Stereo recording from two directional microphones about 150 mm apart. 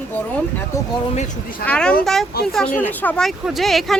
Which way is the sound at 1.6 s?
10° left (ahead or behind).